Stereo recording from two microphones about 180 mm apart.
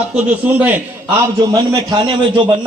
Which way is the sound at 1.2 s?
20° right (ahead or behind).